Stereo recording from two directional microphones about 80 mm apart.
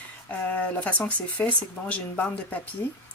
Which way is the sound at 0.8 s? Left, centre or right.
Centre.